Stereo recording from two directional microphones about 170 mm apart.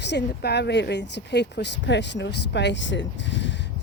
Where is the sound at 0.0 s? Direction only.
90° left.